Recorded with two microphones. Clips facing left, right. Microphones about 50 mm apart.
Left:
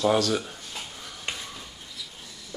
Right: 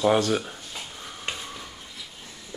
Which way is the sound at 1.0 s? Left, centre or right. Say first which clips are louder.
Right 2 dB; right.